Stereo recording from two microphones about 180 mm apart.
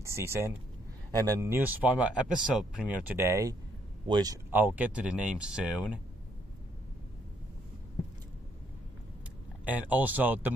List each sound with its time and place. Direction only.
0.0 s speech: 15° right (ahead or behind)
4.5 s speech: 10° right (ahead or behind)
9.7 s speech: 10° right (ahead or behind)